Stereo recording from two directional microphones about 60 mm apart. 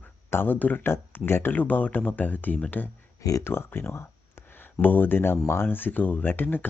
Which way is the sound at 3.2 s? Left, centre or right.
Left.